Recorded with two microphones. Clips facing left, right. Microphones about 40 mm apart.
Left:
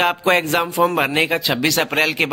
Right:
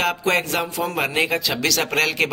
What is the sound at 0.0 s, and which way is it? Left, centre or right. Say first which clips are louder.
Speech: left 4 dB; left.